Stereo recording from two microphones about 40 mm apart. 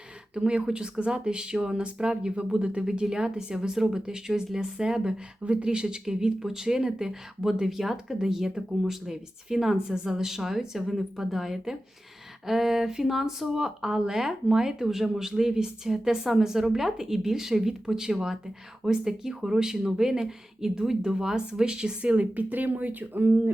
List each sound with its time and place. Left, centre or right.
0.3 s speech: right
22.4 s speech: right